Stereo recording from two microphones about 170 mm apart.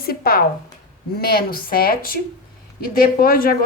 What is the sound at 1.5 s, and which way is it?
A woman's voice, 60° left (ahead or behind).